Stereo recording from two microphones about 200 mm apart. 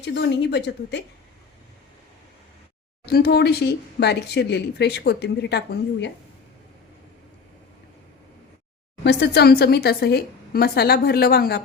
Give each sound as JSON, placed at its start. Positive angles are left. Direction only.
{"t": 0.0, "sound": "speech", "side_deg": 60}
{"t": 3.1, "sound": "speech", "side_deg": 50}
{"t": 9.0, "sound": "speech", "side_deg": 55}